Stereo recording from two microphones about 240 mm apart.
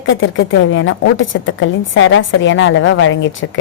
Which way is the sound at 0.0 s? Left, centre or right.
Left.